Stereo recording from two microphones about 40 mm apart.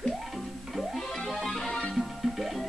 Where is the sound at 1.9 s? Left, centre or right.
Centre.